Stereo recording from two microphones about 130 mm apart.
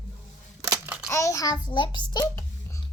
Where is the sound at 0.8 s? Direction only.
10° right (ahead or behind).